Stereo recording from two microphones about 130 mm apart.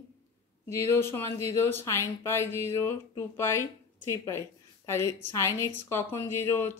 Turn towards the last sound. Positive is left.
turn(degrees=20)  # may be behind; listen again after turning